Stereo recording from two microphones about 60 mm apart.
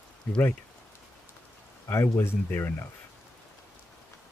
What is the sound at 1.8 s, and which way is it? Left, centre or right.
Speech, left.